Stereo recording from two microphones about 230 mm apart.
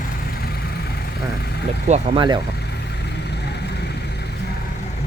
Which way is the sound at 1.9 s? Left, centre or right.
Centre.